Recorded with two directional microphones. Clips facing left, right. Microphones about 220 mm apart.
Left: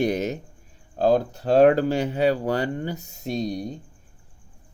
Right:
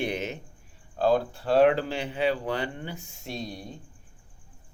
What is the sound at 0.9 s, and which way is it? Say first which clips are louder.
Speech: left 4 dB; 40° left (ahead or behind).